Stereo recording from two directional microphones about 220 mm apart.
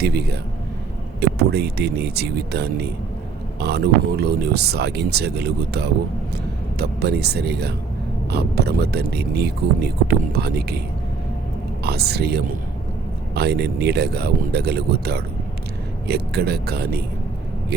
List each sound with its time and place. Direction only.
0.0 s speech: 45° right (ahead or behind)
11.8 s speech: 45° right (ahead or behind)